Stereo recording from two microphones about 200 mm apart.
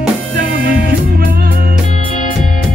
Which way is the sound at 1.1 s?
50° right (ahead or behind).